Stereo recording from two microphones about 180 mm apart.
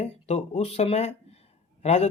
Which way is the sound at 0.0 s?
40° left (ahead or behind).